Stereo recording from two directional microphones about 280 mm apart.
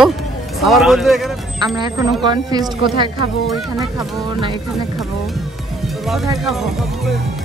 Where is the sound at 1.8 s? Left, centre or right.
Centre.